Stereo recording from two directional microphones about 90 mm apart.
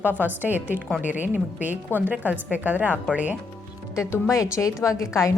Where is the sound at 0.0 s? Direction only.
20° right (ahead or behind).